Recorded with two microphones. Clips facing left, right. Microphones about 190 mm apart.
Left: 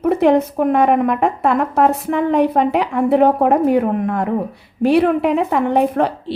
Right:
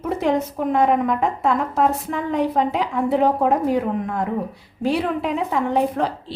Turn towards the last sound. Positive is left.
turn(degrees=65)  # may be behind; listen again after turning